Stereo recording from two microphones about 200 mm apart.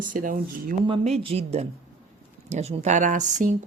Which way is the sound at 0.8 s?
30° right (ahead or behind).